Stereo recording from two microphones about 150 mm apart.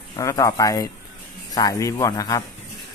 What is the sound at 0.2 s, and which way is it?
Speech, 20° left (ahead or behind).